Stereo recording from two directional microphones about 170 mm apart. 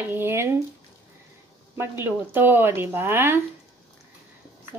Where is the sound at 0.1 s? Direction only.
15° right (ahead or behind).